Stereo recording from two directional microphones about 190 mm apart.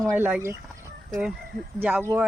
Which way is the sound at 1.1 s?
Centre (ahead or behind).